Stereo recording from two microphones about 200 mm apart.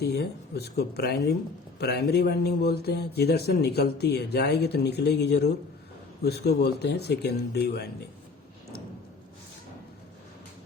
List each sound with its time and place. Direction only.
0.0 s a man's voice: 50° left (ahead or behind)